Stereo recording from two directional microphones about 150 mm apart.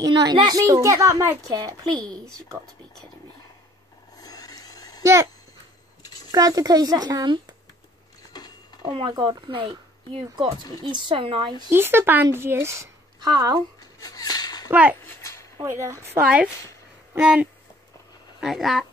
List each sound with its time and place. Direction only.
0.1 s a child's voice: 30° right (ahead or behind)
2.6 s speech: centre (ahead or behind)
4.2 s a sound: 25° left (ahead or behind)
5.0 s a child's voice: 20° right (ahead or behind)
6.3 s a child's voice: 25° right (ahead or behind)
8.8 s a child's voice: 35° right (ahead or behind)
10.6 s a woman's voice: 25° left (ahead or behind)
10.9 s a woman's voice: 35° right (ahead or behind)
11.7 s speech: 15° right (ahead or behind)
13.7 s a sound: 25° left (ahead or behind)
14.7 s speech: 10° right (ahead or behind)
15.0 s a sound: 15° left (ahead or behind)
15.6 s speech: 20° right (ahead or behind); by 18.9 s centre (ahead or behind)